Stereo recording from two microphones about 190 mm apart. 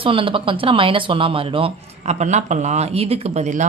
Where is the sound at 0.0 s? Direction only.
25° right (ahead or behind).